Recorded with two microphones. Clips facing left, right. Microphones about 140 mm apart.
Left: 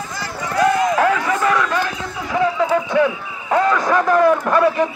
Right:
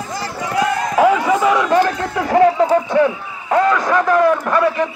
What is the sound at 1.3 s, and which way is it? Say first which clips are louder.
Speech: right 3 dB; 15° right (ahead or behind).